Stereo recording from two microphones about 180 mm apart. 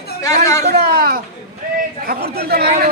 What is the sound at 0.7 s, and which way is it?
Speech, 60° right (ahead or behind).